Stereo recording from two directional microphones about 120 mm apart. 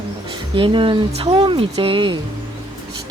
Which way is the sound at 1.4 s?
45° right (ahead or behind).